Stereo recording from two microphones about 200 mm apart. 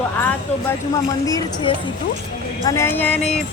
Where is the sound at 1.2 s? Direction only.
15° left (ahead or behind).